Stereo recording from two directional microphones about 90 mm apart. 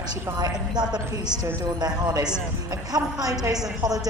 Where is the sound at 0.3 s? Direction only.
50° right (ahead or behind).